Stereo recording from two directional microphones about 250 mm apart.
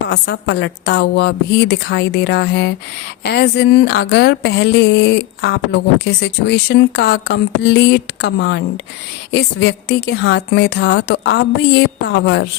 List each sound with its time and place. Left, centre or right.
0.1 s speech: left